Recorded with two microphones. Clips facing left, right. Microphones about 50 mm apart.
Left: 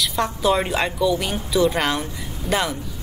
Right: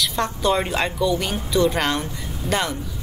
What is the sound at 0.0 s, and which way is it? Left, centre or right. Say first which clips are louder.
A woman's voice: left 1 dB; centre.